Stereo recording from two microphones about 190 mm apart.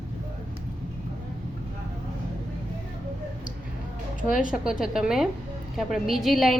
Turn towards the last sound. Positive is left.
turn(degrees=0)  # may be behind; listen again after turning